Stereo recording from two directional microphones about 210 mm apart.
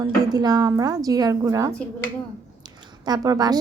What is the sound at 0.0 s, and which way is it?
Speech, 20° right (ahead or behind).